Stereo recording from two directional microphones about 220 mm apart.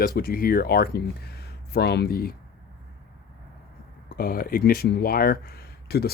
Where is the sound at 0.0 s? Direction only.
40° left (ahead or behind).